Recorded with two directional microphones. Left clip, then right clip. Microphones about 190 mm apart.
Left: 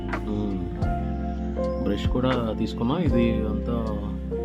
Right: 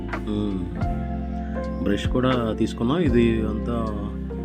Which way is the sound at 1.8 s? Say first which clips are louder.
Right 3 dB; 10° right (ahead or behind).